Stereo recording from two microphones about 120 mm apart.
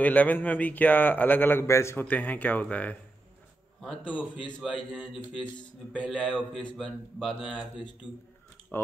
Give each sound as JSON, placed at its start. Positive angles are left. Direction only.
{"t": 0.0, "sound": "speech", "side_deg": 15}
{"t": 8.7, "sound": "speech", "side_deg": 15}